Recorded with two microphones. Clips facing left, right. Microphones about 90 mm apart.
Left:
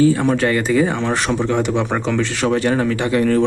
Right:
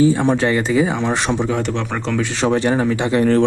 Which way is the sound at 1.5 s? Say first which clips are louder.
Left 3 dB; centre (ahead or behind).